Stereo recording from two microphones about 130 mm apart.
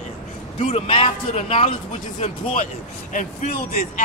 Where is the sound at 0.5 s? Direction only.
50° left (ahead or behind).